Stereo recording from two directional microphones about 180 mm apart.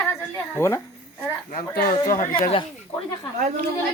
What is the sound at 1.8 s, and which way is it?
Speech, 50° left (ahead or behind).